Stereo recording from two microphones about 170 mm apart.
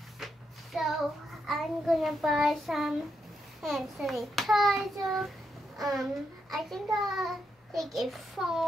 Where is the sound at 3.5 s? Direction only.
Centre (ahead or behind).